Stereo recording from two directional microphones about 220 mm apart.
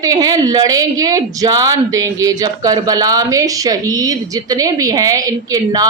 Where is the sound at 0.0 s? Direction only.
15° right (ahead or behind).